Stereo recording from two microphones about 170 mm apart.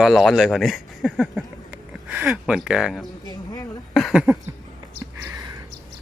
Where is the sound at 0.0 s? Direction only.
Centre (ahead or behind).